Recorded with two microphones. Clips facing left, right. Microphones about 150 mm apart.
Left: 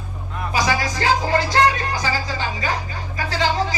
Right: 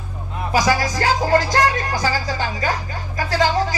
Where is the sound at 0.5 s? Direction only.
40° right (ahead or behind).